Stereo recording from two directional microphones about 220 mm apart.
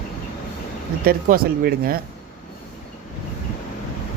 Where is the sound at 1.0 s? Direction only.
45° right (ahead or behind).